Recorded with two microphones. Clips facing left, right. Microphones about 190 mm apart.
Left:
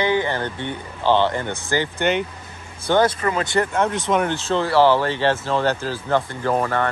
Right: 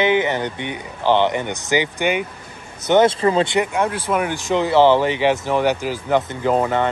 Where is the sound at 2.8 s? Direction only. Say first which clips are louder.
Right 4 dB; 20° right (ahead or behind).